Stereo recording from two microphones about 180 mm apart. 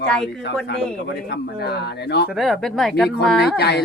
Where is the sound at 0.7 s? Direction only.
65° left (ahead or behind).